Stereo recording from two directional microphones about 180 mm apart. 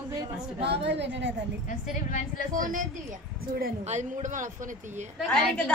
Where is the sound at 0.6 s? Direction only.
70° right (ahead or behind).